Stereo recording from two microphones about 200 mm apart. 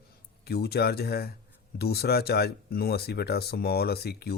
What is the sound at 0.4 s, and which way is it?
Speech, 55° left (ahead or behind).